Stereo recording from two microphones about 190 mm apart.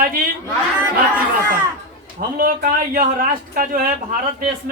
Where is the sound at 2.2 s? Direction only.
50° right (ahead or behind).